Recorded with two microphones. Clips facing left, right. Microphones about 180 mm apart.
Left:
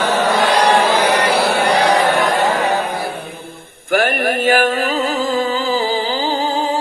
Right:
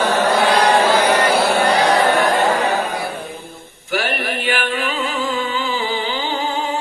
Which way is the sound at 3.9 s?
50° left (ahead or behind).